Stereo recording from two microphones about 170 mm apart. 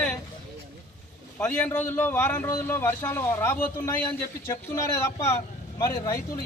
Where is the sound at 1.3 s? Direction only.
5° left (ahead or behind).